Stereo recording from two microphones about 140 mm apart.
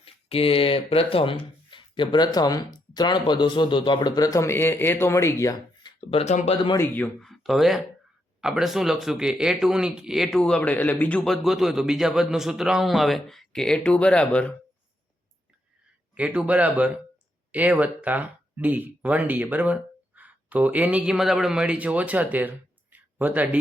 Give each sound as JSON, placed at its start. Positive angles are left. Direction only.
{"t": 0.0, "sound": "a man's voice", "side_deg": 45}
{"t": 6.0, "sound": "speech", "side_deg": 45}
{"t": 6.7, "sound": "speech", "side_deg": 15}
{"t": 7.2, "sound": "speech", "side_deg": 0}
{"t": 16.1, "sound": "speech", "side_deg": -10}